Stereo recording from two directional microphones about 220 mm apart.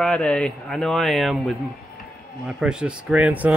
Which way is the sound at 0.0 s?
5° left (ahead or behind).